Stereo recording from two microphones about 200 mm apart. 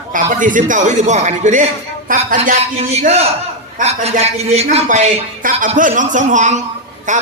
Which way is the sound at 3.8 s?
30° right (ahead or behind).